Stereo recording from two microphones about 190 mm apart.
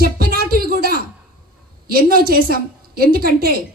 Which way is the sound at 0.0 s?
50° right (ahead or behind).